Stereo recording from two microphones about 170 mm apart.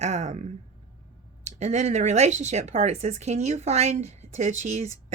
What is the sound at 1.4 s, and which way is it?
Speech, 40° right (ahead or behind).